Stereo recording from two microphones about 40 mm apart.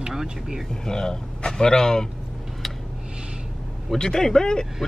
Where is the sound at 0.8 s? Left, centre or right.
Centre.